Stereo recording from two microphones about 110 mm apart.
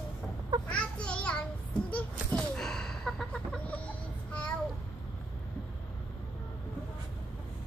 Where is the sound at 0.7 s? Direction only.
10° left (ahead or behind).